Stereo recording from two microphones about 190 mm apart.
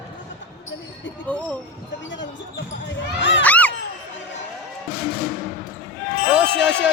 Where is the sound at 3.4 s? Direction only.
10° left (ahead or behind).